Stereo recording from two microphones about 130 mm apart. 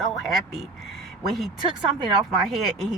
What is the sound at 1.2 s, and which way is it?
Speech, centre (ahead or behind).